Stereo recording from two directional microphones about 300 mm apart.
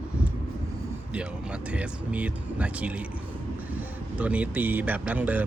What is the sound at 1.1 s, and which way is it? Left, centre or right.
Speech, centre.